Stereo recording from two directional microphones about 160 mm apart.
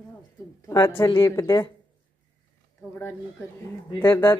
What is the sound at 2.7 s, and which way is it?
Speech, 15° left (ahead or behind).